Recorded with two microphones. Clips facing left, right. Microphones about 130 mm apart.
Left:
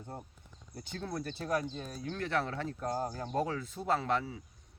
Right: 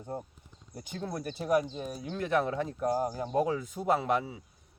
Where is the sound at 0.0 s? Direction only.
15° right (ahead or behind).